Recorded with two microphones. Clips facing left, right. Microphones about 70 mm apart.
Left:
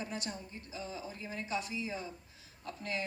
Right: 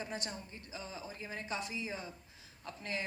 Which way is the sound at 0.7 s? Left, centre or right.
Right.